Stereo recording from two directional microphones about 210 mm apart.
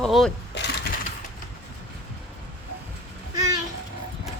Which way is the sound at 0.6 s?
55° left (ahead or behind).